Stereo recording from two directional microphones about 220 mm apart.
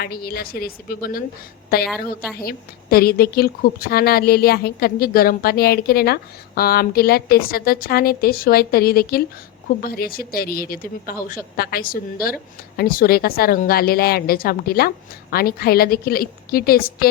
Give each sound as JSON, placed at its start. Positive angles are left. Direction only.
{"t": 0.0, "sound": "a woman's voice", "side_deg": 45}